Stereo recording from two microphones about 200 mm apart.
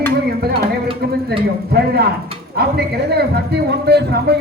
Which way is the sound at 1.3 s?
55° right (ahead or behind).